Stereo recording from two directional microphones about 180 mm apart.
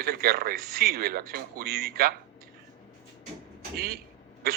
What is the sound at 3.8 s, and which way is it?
Speech, 60° right (ahead or behind).